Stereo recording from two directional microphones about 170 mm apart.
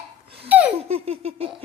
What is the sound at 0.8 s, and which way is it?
Laughter, 40° right (ahead or behind).